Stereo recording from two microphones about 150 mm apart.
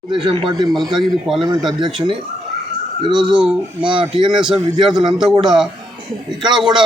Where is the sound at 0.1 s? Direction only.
35° right (ahead or behind).